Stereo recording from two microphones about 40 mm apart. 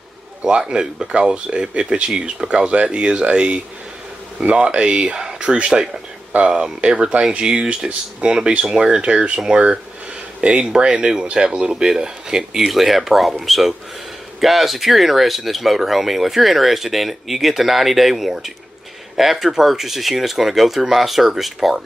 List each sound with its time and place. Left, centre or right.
0.4 s speech: right
10.4 s speech: right
12.6 s speech: centre